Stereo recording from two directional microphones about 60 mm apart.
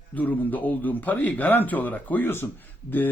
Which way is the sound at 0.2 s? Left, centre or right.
Left.